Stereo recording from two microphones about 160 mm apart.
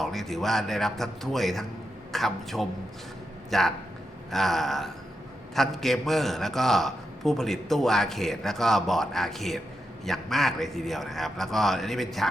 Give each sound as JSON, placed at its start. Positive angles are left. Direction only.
{"t": 0.0, "sound": "a man's voice", "side_deg": 0}